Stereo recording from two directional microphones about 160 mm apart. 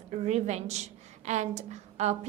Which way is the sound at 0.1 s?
45° right (ahead or behind).